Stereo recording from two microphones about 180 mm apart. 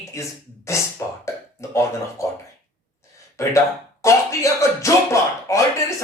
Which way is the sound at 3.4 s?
15° left (ahead or behind).